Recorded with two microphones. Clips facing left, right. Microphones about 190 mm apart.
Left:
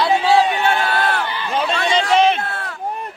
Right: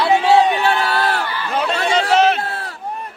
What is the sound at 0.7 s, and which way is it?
Crowd, 35° right (ahead or behind).